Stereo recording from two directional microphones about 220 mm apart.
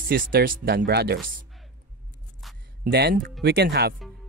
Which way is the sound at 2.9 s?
45° right (ahead or behind).